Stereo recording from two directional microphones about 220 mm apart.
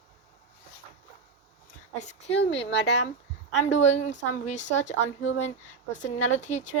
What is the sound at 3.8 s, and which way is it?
Speech, 30° left (ahead or behind).